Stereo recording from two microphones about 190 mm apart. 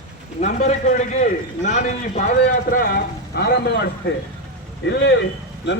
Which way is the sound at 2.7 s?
50° left (ahead or behind).